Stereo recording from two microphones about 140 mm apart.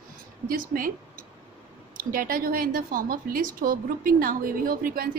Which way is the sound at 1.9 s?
90° right.